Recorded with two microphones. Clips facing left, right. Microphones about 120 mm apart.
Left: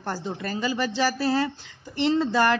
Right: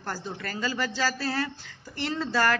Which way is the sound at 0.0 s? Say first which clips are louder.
Left 4 dB; 25° left (ahead or behind).